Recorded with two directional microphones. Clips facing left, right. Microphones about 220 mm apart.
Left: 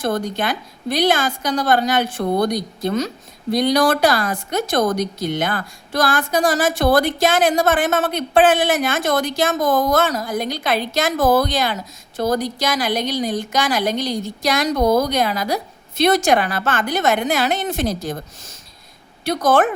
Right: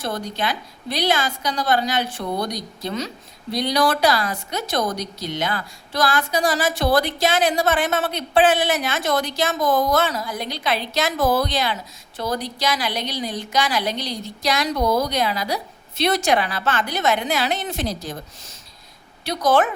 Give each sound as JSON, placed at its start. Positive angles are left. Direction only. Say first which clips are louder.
{"t": 0.0, "sound": "a woman's voice", "louder": "left 5 dB", "side_deg": 50}